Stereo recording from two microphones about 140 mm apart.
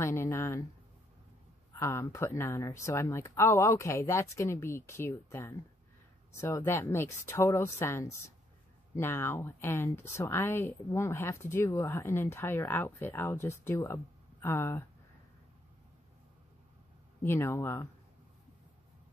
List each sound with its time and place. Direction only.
0.0 s speech: 15° left (ahead or behind)
1.8 s speech: 20° left (ahead or behind)
17.2 s speech: 15° left (ahead or behind)